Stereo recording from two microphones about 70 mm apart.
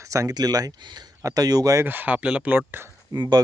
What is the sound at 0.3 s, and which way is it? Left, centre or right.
Speech, right.